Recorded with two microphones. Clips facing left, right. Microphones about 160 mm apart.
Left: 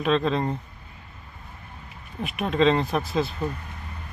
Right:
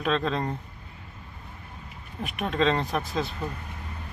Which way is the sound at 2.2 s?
5° left (ahead or behind).